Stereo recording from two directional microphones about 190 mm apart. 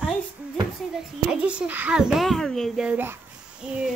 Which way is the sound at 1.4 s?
10° right (ahead or behind).